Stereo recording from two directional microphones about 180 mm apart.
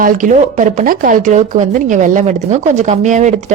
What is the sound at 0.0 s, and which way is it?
A woman's voice, 50° right (ahead or behind).